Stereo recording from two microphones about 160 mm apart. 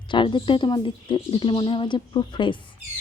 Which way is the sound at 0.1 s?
30° left (ahead or behind).